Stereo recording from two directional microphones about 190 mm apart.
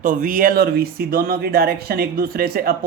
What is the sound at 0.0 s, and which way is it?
Speech, 45° right (ahead or behind).